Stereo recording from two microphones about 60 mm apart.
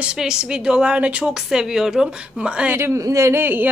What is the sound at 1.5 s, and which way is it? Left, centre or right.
A woman's voice, centre.